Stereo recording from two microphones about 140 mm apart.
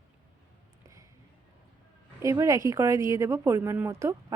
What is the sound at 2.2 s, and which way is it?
Speech, 20° right (ahead or behind).